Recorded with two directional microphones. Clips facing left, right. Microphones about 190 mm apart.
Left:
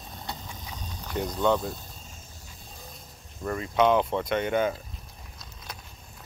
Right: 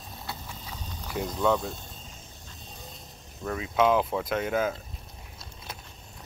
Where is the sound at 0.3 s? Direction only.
15° left (ahead or behind).